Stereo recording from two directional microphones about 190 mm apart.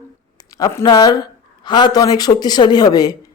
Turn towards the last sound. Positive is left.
turn(degrees=20)  # may be behind; listen again after turning